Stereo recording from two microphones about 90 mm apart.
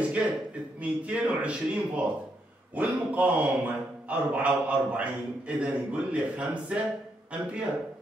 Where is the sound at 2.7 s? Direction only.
15° right (ahead or behind).